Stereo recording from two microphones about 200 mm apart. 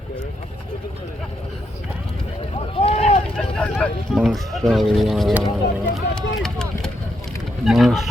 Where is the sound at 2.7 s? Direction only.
30° left (ahead or behind).